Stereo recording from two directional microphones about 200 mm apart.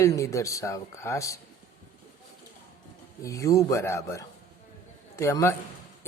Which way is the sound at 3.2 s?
15° left (ahead or behind).